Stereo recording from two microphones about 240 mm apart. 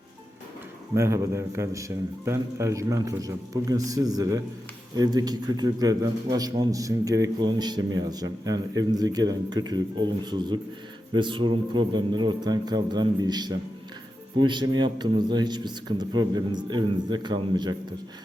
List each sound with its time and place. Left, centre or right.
0.9 s a man's voice: centre